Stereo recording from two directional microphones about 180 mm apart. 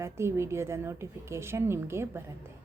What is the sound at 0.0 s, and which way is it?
A woman's voice, 15° right (ahead or behind).